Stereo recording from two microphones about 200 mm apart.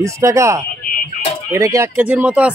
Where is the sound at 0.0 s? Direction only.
15° right (ahead or behind).